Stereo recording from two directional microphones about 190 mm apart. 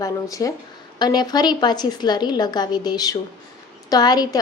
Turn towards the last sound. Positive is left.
turn(degrees=20)  # may be behind; listen again after turning